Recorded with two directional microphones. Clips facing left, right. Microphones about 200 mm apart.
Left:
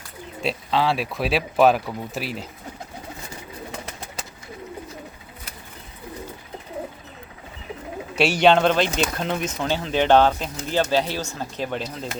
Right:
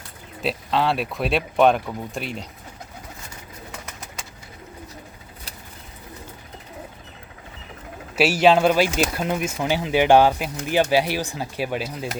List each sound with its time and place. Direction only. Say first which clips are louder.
0.4 s speech: even; centre (ahead or behind)
3.7 s bird: left 3 dB; 30° left (ahead or behind)
8.1 s speech: right 1 dB; 5° right (ahead or behind)